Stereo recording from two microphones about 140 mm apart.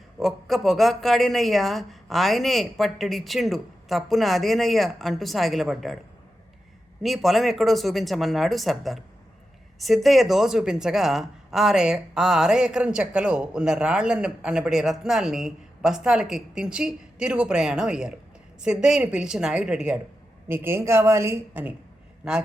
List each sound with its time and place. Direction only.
0.2 s speech: centre (ahead or behind)
7.0 s a woman's voice: centre (ahead or behind)